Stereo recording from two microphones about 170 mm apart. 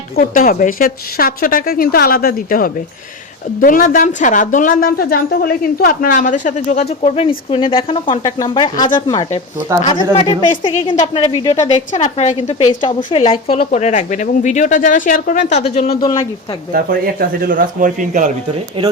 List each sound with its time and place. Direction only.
0.2 s a woman's voice: 50° left (ahead or behind); by 9.2 s 25° left (ahead or behind)
9.8 s a woman's voice: 35° left (ahead or behind)
13.1 s a woman's voice: 30° left (ahead or behind)
13.7 s a woman's voice: 45° left (ahead or behind)
16.0 s a woman's voice: 25° left (ahead or behind)
16.7 s speech: 60° right (ahead or behind)